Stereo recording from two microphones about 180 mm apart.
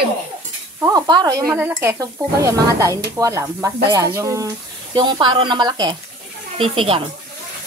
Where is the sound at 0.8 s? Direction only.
20° right (ahead or behind).